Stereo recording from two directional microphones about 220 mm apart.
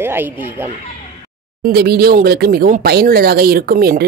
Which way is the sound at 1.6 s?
45° right (ahead or behind).